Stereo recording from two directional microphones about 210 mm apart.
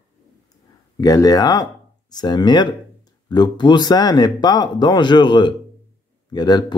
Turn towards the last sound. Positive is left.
turn(degrees=20)  # may be behind; listen again after turning